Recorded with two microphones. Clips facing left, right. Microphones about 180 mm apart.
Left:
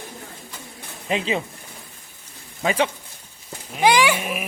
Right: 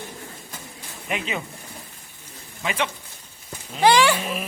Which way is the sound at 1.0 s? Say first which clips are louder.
Left 5 dB; 30° left (ahead or behind).